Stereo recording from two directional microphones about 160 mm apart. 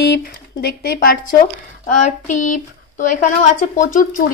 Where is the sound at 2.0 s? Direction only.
55° left (ahead or behind).